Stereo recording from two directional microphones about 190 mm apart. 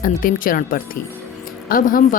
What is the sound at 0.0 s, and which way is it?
A woman's voice, 45° left (ahead or behind).